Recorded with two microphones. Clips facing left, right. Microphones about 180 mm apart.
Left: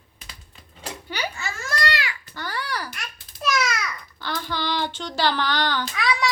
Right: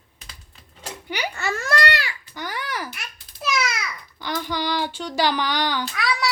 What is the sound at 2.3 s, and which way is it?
Babbling, 15° right (ahead or behind).